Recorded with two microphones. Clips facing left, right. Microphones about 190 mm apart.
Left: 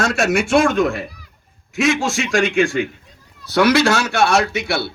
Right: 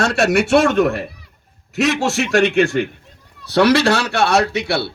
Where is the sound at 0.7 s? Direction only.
35° right (ahead or behind).